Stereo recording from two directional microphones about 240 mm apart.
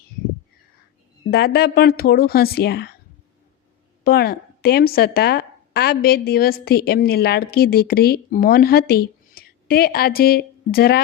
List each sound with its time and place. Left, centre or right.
1.3 s a woman's voice: left
4.0 s a woman's voice: left